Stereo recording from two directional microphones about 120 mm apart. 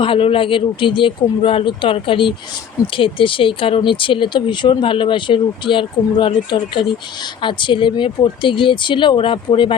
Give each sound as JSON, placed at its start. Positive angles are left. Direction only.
{"t": 0.0, "sound": "speech", "side_deg": 45}